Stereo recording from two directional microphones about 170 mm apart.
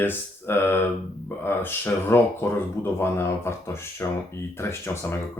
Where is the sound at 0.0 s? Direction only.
10° left (ahead or behind).